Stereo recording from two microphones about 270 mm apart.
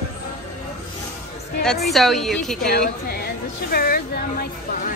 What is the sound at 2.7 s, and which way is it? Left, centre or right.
A woman's voice, left.